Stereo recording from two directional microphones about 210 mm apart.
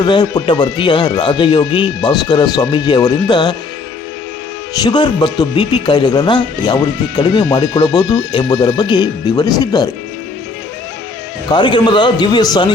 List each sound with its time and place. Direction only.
0.0 s speech: 20° left (ahead or behind)
4.7 s speech: 20° left (ahead or behind)
11.5 s speech: 20° left (ahead or behind)